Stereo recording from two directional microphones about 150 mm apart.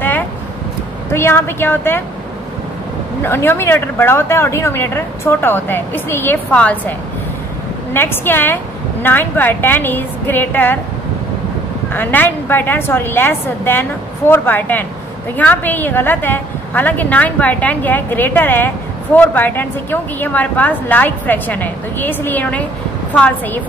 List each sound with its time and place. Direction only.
1.1 s speech: 15° left (ahead or behind)
3.2 s speech: 15° left (ahead or behind)
11.9 s speech: 15° left (ahead or behind)